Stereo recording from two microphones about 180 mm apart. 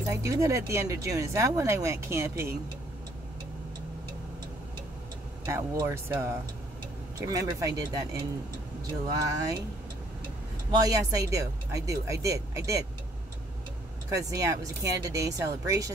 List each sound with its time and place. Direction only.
0.1 s speech: 15° right (ahead or behind)
5.5 s speech: 15° right (ahead or behind)
10.7 s speech: 20° right (ahead or behind)
14.1 s speech: 20° right (ahead or behind)